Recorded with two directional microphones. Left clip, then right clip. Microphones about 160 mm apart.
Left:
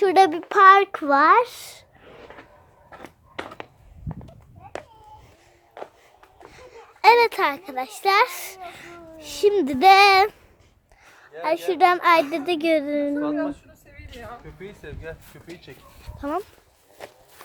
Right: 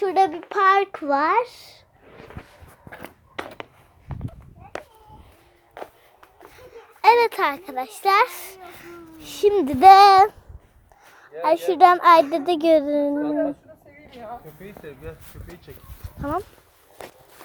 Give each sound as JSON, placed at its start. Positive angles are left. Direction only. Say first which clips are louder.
{"t": 0.0, "sound": "a child's voice", "louder": "left 3 dB", "side_deg": 55}
{"t": 0.4, "sound": "a child's voice", "louder": "left 5 dB", "side_deg": 20}
{"t": 3.0, "sound": "a sound", "louder": "right 1 dB", "side_deg": -75}
{"t": 5.8, "sound": "a sound", "louder": "right 1 dB", "side_deg": -90}
{"t": 6.6, "sound": "babbling", "louder": "left 3 dB", "side_deg": 10}
{"t": 7.3, "sound": "a child's voice", "louder": "even", "side_deg": 0}
{"t": 8.3, "sound": "a child's voice", "louder": "left 3 dB", "side_deg": 15}
{"t": 11.4, "sound": "a child's voice", "louder": "right 4 dB", "side_deg": -15}
{"t": 14.1, "sound": "speech", "louder": "right 2 dB", "side_deg": 20}
{"t": 14.6, "sound": "speech", "louder": "left 1 dB", "side_deg": 45}
{"t": 16.0, "sound": "dog", "louder": "right 1 dB", "side_deg": 0}